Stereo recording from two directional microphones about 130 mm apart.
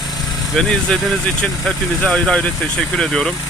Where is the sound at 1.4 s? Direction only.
5° left (ahead or behind).